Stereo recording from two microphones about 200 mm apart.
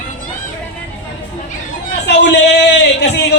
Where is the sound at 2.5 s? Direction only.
60° left (ahead or behind).